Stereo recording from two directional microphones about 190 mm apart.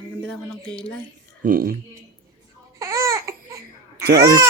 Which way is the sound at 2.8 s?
15° right (ahead or behind).